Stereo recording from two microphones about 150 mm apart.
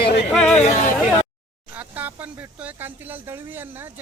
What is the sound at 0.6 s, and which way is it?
Speech, 50° left (ahead or behind).